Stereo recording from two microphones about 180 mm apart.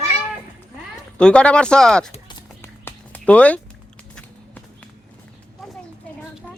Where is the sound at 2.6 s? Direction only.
10° left (ahead or behind).